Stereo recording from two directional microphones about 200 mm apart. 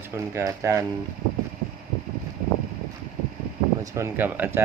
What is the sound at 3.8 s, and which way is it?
Speech, 15° right (ahead or behind).